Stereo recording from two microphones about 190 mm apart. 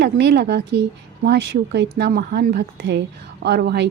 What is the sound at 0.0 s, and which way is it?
Speech, 65° right (ahead or behind).